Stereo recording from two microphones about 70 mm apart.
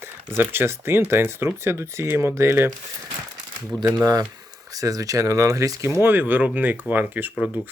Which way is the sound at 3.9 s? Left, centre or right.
Right.